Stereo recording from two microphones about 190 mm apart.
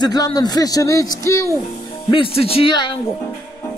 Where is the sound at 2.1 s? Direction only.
30° left (ahead or behind).